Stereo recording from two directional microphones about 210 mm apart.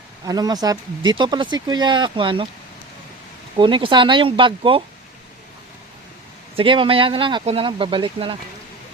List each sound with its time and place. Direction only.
0.3 s speech: 20° right (ahead or behind)
3.6 s speech: 25° right (ahead or behind)
6.6 s speech: 25° right (ahead or behind)